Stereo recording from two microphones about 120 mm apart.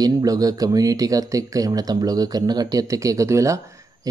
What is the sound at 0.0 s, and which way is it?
Speech, 30° right (ahead or behind).